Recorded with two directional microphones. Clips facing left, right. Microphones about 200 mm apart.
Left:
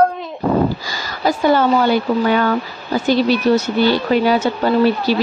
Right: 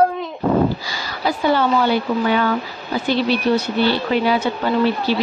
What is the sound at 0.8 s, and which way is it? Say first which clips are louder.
A woman's voice: left 3 dB; 45° left (ahead or behind).